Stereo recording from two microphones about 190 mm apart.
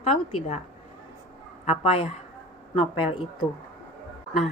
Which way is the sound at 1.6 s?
30° left (ahead or behind).